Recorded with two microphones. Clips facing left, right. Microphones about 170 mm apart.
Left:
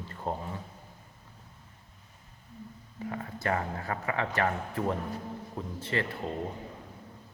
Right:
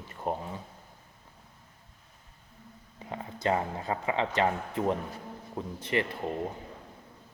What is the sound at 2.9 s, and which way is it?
Speech, 20° right (ahead or behind).